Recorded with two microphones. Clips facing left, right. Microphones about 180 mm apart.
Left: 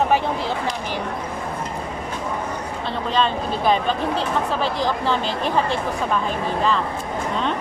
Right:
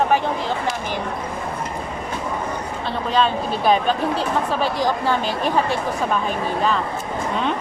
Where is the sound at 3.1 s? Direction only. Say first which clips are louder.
Right 2 dB; 10° right (ahead or behind).